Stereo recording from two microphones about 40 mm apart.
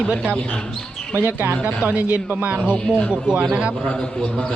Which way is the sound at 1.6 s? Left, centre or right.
Right.